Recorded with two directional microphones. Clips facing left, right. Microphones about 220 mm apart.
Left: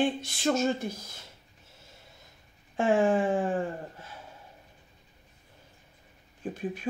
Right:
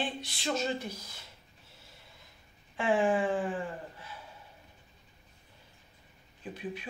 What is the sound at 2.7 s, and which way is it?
Speech, 45° left (ahead or behind).